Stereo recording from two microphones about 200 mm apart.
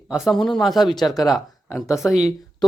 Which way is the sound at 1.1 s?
20° left (ahead or behind).